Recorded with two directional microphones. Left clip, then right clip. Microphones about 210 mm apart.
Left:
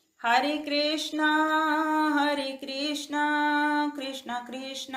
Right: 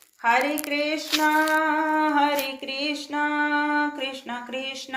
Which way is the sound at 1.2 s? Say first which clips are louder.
Right 3 dB; 35° left (ahead or behind).